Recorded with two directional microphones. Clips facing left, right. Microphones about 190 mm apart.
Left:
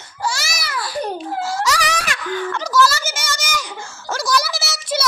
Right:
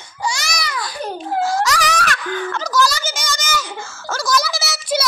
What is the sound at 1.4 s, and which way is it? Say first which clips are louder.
Wail: right 4 dB; 10° left (ahead or behind).